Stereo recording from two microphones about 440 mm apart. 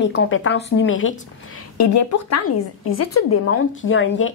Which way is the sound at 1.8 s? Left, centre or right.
Left.